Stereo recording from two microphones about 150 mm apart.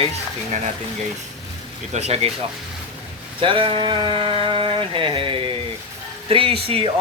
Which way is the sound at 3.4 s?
35° right (ahead or behind).